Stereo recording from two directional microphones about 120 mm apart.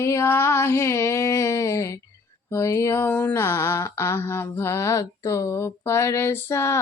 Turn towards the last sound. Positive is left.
turn(degrees=25)  # may be behind; listen again after turning